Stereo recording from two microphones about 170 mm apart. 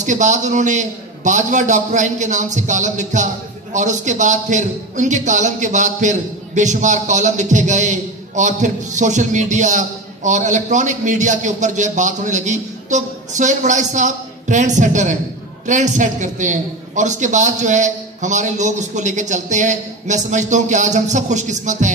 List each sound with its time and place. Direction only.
0.0 s a man's voice: 45° right (ahead or behind)